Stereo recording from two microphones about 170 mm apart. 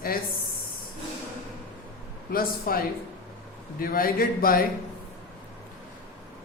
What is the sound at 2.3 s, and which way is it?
Speech, 60° left (ahead or behind).